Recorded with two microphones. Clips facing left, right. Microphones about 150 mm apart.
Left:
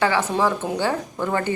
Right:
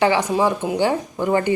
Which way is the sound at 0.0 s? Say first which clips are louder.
Right 3 dB; 15° right (ahead or behind).